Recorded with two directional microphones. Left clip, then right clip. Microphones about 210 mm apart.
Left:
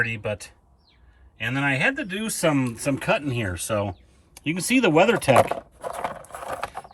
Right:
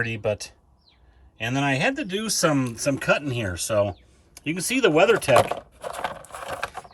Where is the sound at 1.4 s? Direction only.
5° right (ahead or behind).